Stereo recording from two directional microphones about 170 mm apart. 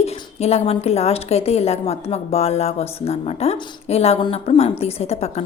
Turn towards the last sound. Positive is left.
turn(degrees=40)  # may be behind; listen again after turning